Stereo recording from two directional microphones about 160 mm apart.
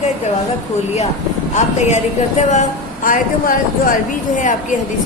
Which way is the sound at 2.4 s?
45° left (ahead or behind).